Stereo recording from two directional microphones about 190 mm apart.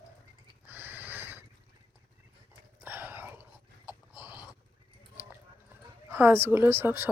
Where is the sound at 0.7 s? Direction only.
10° right (ahead or behind).